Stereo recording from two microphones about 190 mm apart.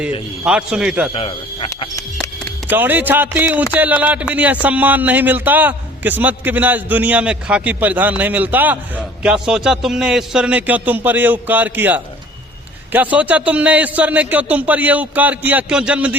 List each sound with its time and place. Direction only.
0.4 s a man's voice: 5° right (ahead or behind)
1.1 s speech: 25° left (ahead or behind)
2.6 s a man's voice: 10° right (ahead or behind)